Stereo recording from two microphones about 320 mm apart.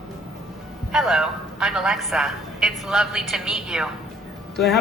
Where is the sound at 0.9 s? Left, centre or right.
Centre.